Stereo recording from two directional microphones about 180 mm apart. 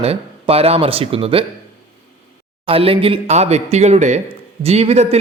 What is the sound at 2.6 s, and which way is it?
Speech, 30° right (ahead or behind).